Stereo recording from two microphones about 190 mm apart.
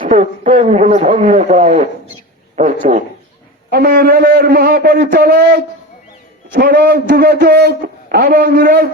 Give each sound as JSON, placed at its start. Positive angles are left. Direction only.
{"t": 0.0, "sound": "a man's voice", "side_deg": -40}
{"t": 3.7, "sound": "a man's voice", "side_deg": -55}